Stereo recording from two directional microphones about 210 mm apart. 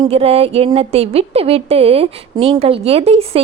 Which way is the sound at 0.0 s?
30° right (ahead or behind).